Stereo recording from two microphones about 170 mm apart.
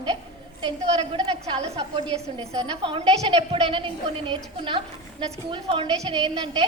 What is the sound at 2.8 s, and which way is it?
A woman's voice, 30° right (ahead or behind).